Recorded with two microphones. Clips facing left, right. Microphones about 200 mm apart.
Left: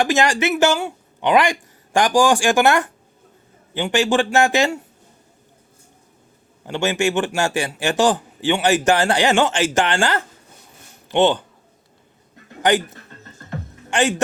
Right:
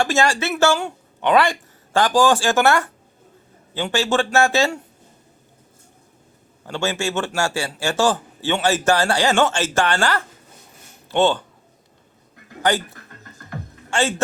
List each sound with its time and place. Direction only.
0.0 s speech: 15° left (ahead or behind)
6.7 s a man's voice: 15° left (ahead or behind)
12.6 s speech: 20° left (ahead or behind)
13.5 s music: 15° left (ahead or behind)